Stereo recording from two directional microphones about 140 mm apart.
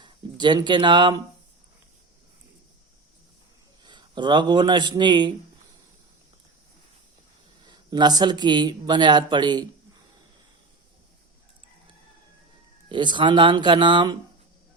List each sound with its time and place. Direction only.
0.0 s speech: 35° right (ahead or behind)
3.8 s speech: 35° right (ahead or behind)
7.7 s speech: 30° right (ahead or behind)
12.9 s speech: 35° right (ahead or behind)